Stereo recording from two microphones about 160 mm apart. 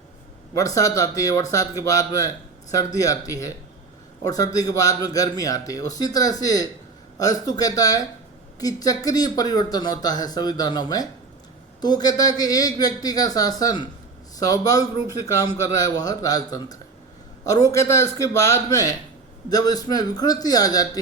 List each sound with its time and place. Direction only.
0.5 s speech: 20° left (ahead or behind)